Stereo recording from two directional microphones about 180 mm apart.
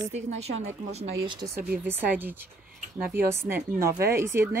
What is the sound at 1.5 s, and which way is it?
A woman's voice, 10° right (ahead or behind).